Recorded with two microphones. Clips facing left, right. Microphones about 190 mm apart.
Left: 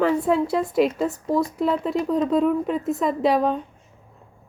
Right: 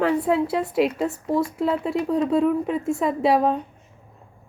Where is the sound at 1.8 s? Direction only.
5° right (ahead or behind).